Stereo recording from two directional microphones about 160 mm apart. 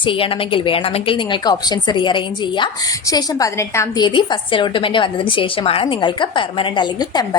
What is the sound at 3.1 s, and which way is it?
A woman's voice, 20° left (ahead or behind).